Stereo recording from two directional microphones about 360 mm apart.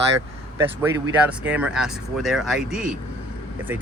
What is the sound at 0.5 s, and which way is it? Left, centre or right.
Speech, centre.